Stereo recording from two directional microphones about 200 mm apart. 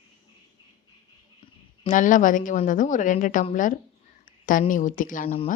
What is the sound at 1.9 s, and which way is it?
Speech, 40° left (ahead or behind).